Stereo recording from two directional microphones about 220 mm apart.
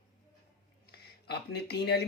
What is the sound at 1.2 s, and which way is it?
Speech, 45° left (ahead or behind).